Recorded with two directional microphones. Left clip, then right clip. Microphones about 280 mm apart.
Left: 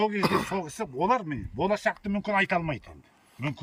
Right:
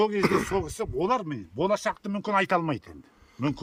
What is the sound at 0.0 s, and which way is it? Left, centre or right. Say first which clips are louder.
A man's voice: right 2 dB; centre.